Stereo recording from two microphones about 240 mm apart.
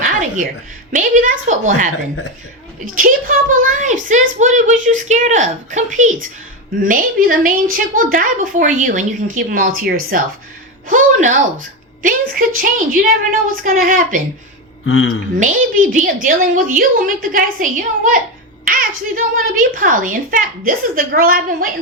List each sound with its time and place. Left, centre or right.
0.0 s music: right
0.9 s a woman's voice: right
15.4 s a woman's voice: right